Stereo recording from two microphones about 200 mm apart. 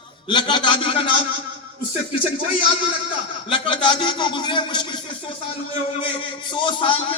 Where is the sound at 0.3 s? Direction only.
25° left (ahead or behind).